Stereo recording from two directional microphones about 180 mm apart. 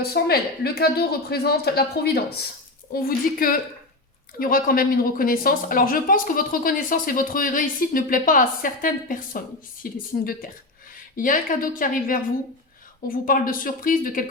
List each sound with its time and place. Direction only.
0.0 s a woman's voice: 60° left (ahead or behind)